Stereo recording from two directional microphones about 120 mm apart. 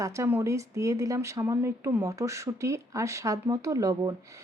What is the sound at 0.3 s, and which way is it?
Speech, 20° right (ahead or behind).